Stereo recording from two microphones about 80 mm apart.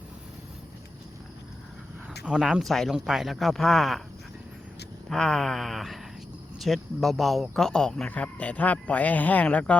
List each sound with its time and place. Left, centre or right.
2.4 s speech: centre
5.0 s speech: centre